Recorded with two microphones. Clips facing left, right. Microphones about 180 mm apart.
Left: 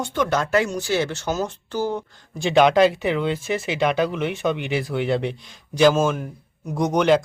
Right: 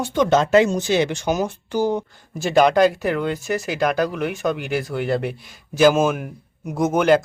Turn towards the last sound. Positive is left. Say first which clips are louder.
# right 1 dB
turn(degrees=-5)  # may be behind; listen again after turning